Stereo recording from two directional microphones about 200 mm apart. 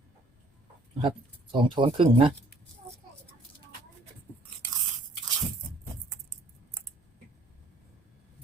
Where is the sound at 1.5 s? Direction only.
25° right (ahead or behind).